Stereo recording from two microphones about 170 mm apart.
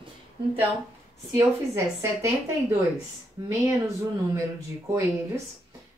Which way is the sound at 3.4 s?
20° right (ahead or behind).